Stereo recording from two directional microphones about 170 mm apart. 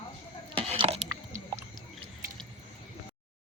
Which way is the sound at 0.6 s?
35° right (ahead or behind).